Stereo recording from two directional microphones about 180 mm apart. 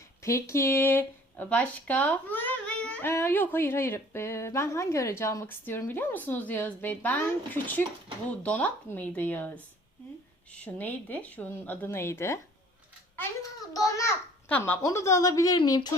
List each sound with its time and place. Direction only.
0.2 s speech: 15° left (ahead or behind)
10.6 s speech: 10° left (ahead or behind)
13.7 s speech: 15° left (ahead or behind)